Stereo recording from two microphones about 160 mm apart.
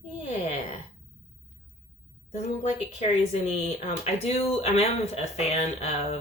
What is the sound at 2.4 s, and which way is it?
Speech, 40° left (ahead or behind).